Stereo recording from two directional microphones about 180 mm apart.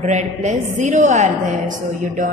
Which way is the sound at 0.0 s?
40° right (ahead or behind).